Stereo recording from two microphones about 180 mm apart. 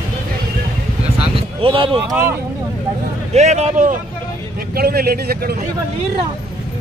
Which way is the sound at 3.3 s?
40° right (ahead or behind).